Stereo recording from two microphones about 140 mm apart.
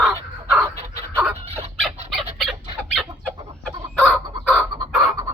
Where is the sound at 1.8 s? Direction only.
Centre (ahead or behind).